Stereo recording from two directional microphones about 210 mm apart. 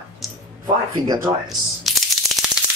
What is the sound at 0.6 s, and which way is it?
Speech, 20° right (ahead or behind).